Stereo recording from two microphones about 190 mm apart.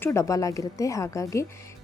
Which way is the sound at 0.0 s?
15° left (ahead or behind).